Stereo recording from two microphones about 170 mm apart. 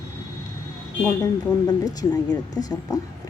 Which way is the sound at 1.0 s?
10° left (ahead or behind).